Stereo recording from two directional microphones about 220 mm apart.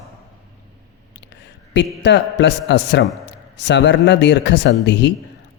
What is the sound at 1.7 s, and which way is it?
Speech, 55° left (ahead or behind).